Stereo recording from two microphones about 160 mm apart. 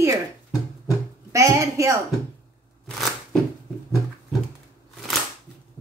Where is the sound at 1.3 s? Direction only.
20° right (ahead or behind).